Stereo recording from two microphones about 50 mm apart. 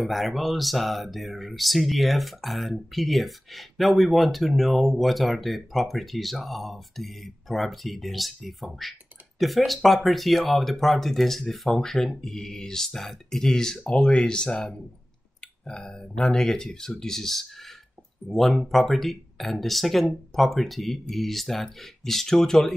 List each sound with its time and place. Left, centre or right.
0.0 s speech: centre